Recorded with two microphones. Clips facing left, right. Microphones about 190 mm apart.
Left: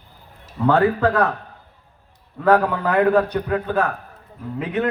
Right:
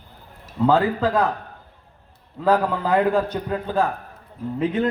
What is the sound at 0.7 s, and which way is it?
Speech, 65° left (ahead or behind).